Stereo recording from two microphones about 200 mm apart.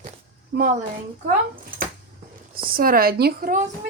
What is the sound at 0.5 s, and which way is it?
Speech, 45° right (ahead or behind).